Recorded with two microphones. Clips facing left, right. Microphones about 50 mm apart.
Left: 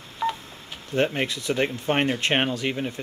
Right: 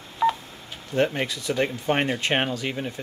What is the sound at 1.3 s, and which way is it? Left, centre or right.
Speech, left.